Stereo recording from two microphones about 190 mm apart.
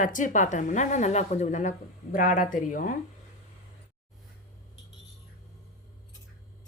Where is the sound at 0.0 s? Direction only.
45° left (ahead or behind).